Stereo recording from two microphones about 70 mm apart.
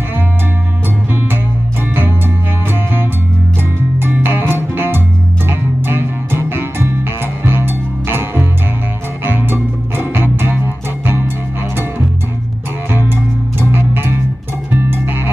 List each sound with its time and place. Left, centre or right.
2.0 s music: right
12.9 s music: right